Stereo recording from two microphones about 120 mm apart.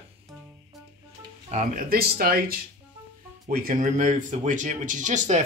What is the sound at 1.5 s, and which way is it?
Speech, 75° right (ahead or behind).